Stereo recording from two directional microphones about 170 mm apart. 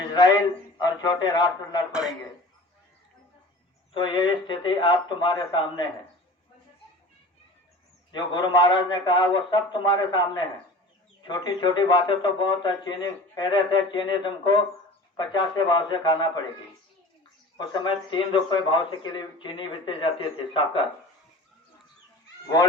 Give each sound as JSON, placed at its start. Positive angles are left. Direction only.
{"t": 0.1, "sound": "speech", "side_deg": 25}
{"t": 1.9, "sound": "speech", "side_deg": -5}
{"t": 3.9, "sound": "speech", "side_deg": 25}
{"t": 8.1, "sound": "speech", "side_deg": 25}
{"t": 17.6, "sound": "speech", "side_deg": 25}